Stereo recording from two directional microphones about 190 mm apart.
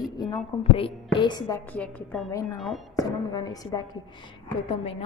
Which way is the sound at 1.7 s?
5° left (ahead or behind).